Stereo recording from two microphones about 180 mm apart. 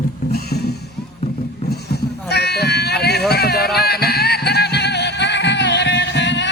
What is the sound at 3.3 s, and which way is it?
Music, 60° left (ahead or behind).